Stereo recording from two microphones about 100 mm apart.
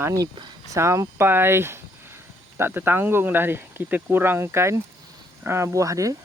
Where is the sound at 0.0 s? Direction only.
35° right (ahead or behind).